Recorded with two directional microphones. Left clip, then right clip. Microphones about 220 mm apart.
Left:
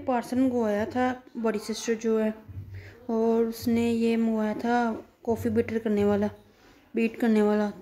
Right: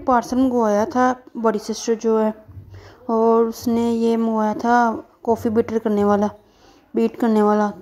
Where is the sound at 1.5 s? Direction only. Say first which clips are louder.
Right 7 dB; 15° right (ahead or behind).